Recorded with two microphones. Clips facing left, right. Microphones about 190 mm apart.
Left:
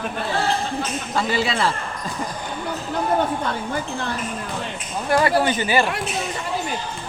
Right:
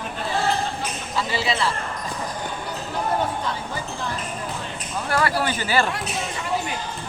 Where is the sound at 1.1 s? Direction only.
55° left (ahead or behind).